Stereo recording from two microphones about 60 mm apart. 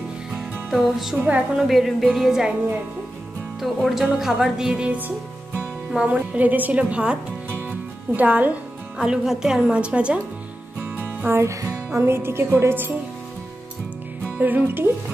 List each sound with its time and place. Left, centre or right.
0.7 s speech: centre
1.1 s a woman's voice: right
1.6 s speech: centre
3.6 s speech: centre
4.2 s speech: centre; by 6.8 s right
6.8 s speech: centre
7.5 s music: right
8.9 s speech: centre
11.1 s music: right
11.4 s music: right
12.0 s speech: right
14.4 s speech: right